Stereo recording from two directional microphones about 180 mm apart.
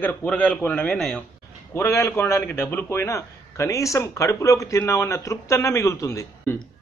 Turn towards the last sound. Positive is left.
turn(degrees=15)  # may be behind; listen again after turning